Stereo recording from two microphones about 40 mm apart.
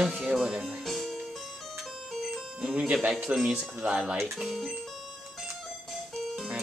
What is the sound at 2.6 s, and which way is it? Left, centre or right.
Music, right.